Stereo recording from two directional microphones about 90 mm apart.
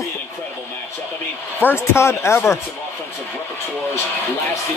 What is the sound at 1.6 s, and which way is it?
Speech, 25° left (ahead or behind).